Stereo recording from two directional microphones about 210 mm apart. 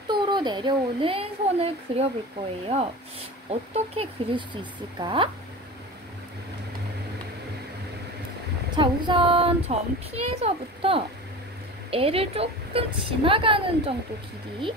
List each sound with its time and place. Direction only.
0.1 s a child's voice: 20° right (ahead or behind)
3.4 s a child's voice: 30° right (ahead or behind)
8.7 s a child's voice: 20° right (ahead or behind)